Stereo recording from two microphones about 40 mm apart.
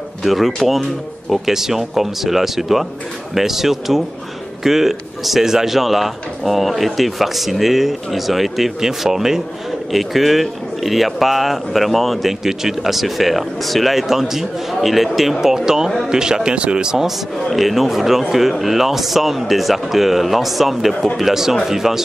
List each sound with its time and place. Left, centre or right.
0.2 s speech: centre
17.5 s speech: centre